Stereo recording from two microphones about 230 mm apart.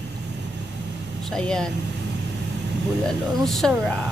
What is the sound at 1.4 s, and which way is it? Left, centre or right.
Speech, centre.